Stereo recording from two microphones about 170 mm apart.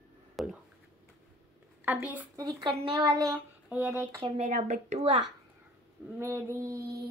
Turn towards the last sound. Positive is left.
turn(degrees=-20)  # may be behind; listen again after turning